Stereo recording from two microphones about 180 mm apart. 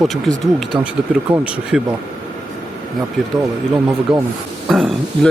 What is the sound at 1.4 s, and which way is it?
Speech, 5° right (ahead or behind).